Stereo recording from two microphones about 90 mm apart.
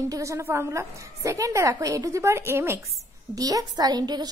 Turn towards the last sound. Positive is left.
turn(degrees=-50)  # may be behind; listen again after turning